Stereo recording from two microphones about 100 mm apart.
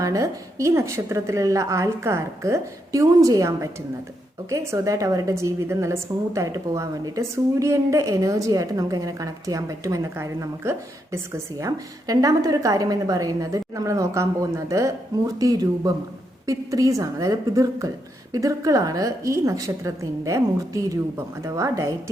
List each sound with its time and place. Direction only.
0.0 s a woman's voice: 35° right (ahead or behind)